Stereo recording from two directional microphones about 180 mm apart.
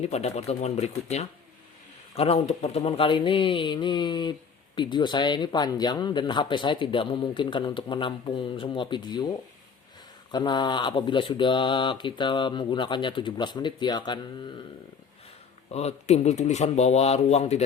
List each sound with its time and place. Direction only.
0.0 s speech: 40° left (ahead or behind)
15.7 s speech: 35° left (ahead or behind)